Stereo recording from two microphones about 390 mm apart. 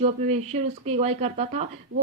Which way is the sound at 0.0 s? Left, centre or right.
Centre.